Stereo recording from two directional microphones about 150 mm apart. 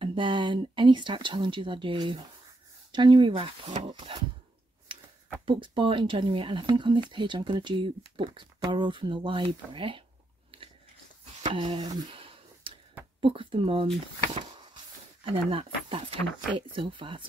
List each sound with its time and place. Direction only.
0.0 s speech: 35° right (ahead or behind)
5.4 s speech: 35° right (ahead or behind)
10.5 s biting: 35° right (ahead or behind)
11.5 s a sound: 30° right (ahead or behind)
13.2 s speech: 35° right (ahead or behind)
15.5 s speech: 40° right (ahead or behind)